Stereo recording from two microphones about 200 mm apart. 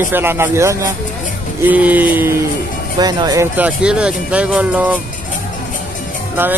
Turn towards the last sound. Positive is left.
turn(degrees=-10)  # may be behind; listen again after turning